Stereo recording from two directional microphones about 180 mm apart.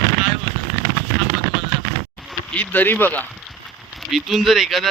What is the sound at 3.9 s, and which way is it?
Speech, centre (ahead or behind).